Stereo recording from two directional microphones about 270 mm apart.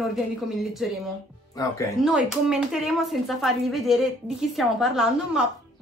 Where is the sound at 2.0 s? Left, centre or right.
Centre.